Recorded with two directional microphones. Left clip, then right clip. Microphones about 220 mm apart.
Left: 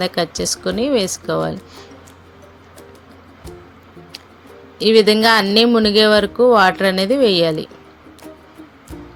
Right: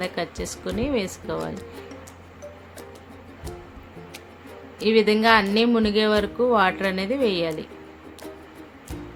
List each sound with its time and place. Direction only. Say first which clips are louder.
0.0 s speech: left 9 dB; 30° left (ahead or behind)
4.8 s speech: left 7 dB; 30° left (ahead or behind)